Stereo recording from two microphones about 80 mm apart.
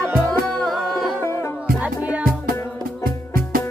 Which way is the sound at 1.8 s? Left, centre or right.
Centre.